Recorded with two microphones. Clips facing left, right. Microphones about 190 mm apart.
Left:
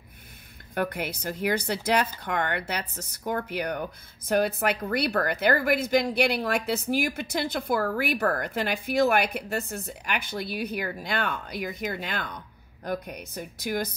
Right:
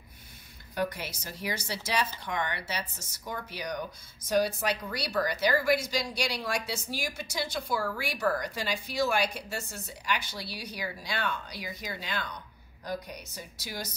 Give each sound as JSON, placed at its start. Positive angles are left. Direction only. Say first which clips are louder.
{"t": 0.7, "sound": "a woman's voice", "louder": "left 3 dB", "side_deg": 55}